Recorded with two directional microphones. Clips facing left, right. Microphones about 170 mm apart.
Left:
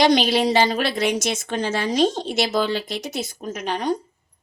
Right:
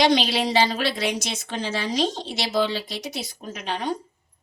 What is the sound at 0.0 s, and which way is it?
Speech, 45° left (ahead or behind).